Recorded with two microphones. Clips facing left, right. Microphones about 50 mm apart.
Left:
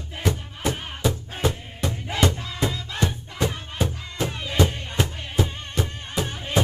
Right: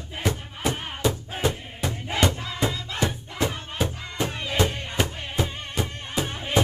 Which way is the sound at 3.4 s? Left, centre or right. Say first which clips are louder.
Left 1 dB; centre.